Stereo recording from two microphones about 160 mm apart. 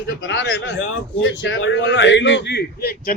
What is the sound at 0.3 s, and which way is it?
Speech, 90° left.